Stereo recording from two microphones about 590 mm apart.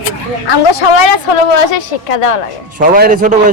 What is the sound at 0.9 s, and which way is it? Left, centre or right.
A woman's voice, left.